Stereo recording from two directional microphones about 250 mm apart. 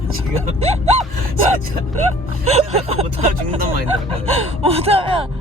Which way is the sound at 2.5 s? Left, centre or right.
Right.